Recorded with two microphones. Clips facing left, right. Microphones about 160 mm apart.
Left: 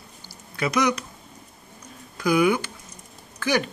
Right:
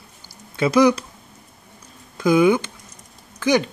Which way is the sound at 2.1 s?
25° right (ahead or behind).